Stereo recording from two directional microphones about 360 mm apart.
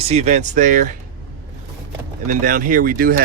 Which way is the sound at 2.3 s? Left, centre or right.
Right.